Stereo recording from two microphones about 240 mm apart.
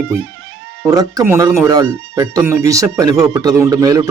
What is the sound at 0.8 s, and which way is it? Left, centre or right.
Speech, centre.